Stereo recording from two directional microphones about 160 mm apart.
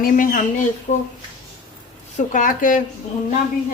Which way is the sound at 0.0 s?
60° left (ahead or behind).